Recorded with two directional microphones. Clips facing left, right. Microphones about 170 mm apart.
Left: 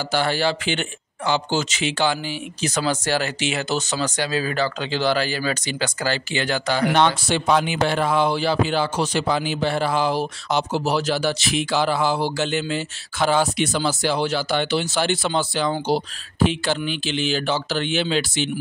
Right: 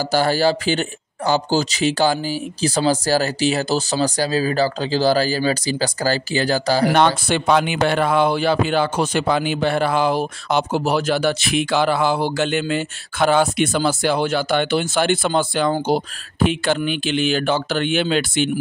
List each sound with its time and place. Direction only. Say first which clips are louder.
0.1 s speech: right 4 dB; 40° right (ahead or behind)
7.0 s speech: right 2 dB; 55° right (ahead or behind)